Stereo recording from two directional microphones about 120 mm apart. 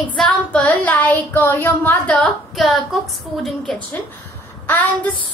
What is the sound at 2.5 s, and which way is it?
A woman's voice, centre (ahead or behind).